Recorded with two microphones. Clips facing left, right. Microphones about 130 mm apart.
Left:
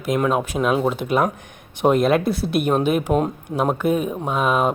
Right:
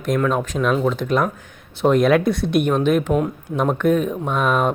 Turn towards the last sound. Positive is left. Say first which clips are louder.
# even
turn(degrees=5)  # may be behind; listen again after turning